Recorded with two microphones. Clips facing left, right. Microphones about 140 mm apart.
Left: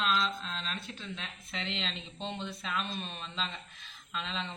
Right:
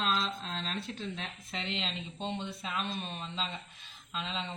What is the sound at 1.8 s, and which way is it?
Speech, 20° right (ahead or behind).